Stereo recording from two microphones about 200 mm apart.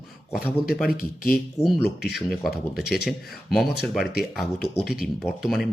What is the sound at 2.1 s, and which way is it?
Speech, centre (ahead or behind).